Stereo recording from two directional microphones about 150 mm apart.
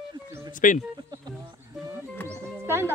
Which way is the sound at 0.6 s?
60° left (ahead or behind).